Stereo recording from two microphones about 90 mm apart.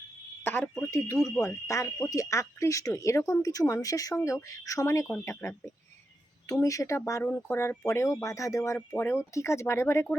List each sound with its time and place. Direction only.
0.4 s speech: 25° left (ahead or behind)
9.0 s speech: 20° left (ahead or behind)